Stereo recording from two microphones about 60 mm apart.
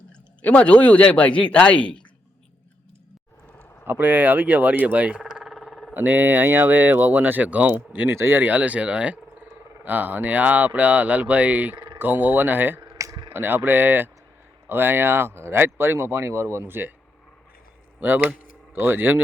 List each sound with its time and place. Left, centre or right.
0.4 s speech: left
3.8 s speech: right
5.2 s a sound: centre
5.9 s speech: right
8.1 s speech: right
8.4 s speech: right
18.0 s speech: right